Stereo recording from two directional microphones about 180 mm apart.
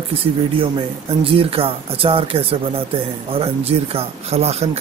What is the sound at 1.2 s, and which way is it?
Speech, 30° right (ahead or behind).